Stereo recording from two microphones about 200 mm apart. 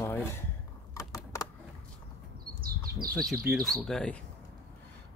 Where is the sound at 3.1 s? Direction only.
Centre (ahead or behind).